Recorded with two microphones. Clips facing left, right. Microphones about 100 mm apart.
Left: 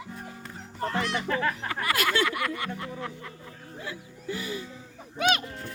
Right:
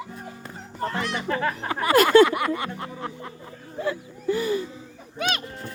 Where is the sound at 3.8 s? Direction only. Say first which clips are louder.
Right 12 dB; 45° right (ahead or behind).